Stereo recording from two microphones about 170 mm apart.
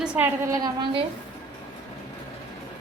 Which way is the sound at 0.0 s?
10° right (ahead or behind).